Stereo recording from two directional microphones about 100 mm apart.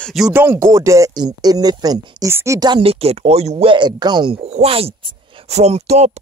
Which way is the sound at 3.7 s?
50° right (ahead or behind).